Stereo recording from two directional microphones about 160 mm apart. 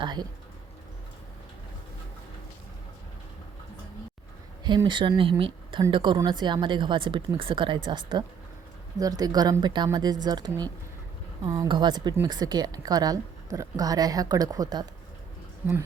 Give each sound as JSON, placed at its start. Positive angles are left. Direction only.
{"t": 0.0, "sound": "a woman's voice", "side_deg": -25}
{"t": 4.6, "sound": "a woman's voice", "side_deg": -30}
{"t": 15.6, "sound": "speech", "side_deg": -10}